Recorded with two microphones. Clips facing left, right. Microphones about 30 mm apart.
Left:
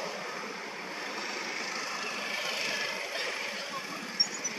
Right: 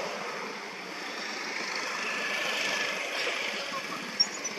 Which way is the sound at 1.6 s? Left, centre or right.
Right.